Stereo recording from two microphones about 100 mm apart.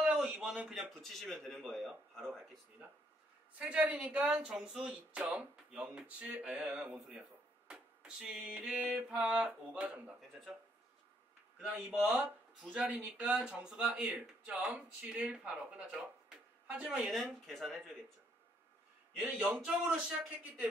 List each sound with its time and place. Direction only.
0.0 s a man's voice: 10° right (ahead or behind)
3.5 s speech: 15° right (ahead or behind)
12.6 s speech: 15° right (ahead or behind)
17.1 s speech: centre (ahead or behind)
19.2 s speech: 15° right (ahead or behind)